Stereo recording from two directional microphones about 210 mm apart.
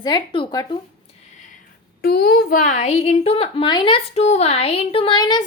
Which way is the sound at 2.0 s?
50° left (ahead or behind).